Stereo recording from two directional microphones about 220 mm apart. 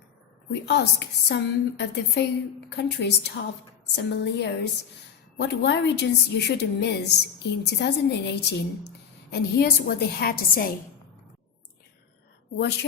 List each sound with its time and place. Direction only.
0.6 s a woman's voice: 50° left (ahead or behind)
12.5 s a woman's voice: 50° left (ahead or behind)